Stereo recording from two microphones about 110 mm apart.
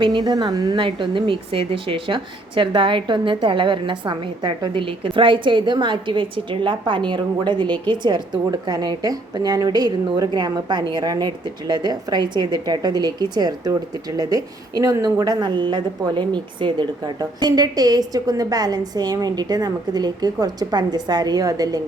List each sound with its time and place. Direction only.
0.0 s a woman's voice: 45° right (ahead or behind)
0.8 s a woman's voice: 50° right (ahead or behind); by 21.8 s 35° right (ahead or behind)